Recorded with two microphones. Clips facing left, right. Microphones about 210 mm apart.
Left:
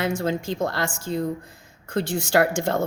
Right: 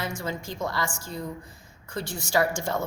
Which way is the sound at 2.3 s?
70° left (ahead or behind).